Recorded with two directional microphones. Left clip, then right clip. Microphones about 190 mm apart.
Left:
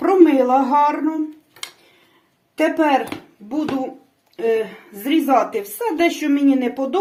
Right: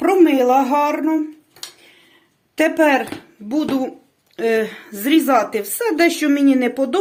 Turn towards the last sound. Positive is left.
turn(degrees=-45)  # may be behind; listen again after turning